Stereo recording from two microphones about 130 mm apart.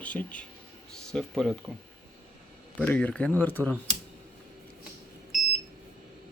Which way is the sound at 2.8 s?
10° left (ahead or behind).